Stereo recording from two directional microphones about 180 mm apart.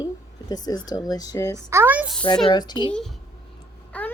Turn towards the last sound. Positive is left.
turn(degrees=10)  # may be behind; listen again after turning